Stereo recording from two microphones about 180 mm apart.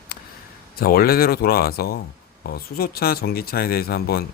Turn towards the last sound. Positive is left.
turn(degrees=60)  # may be behind; listen again after turning